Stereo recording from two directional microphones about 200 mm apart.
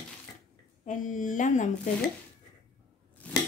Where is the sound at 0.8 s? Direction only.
40° left (ahead or behind).